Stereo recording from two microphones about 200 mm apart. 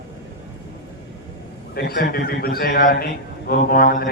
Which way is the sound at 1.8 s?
50° left (ahead or behind).